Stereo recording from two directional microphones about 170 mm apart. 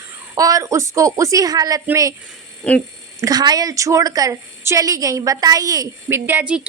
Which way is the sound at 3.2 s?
25° right (ahead or behind).